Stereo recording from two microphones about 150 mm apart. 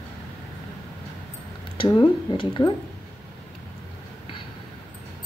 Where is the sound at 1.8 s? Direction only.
35° left (ahead or behind).